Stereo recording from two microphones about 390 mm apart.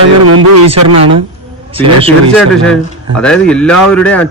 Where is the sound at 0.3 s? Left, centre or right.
Right.